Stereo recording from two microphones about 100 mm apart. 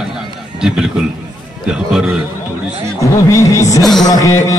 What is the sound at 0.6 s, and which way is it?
A man's voice, 5° right (ahead or behind).